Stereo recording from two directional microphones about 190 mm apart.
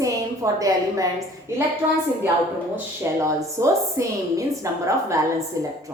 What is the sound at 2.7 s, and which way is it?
A woman's voice, 15° right (ahead or behind).